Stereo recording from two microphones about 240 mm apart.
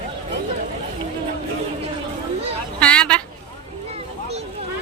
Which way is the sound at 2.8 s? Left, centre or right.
Centre.